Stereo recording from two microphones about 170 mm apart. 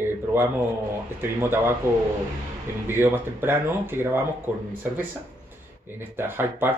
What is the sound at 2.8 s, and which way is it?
Speech, 15° right (ahead or behind).